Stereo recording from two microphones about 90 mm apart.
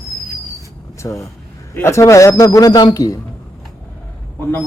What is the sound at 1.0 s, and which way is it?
A man's voice, 35° left (ahead or behind).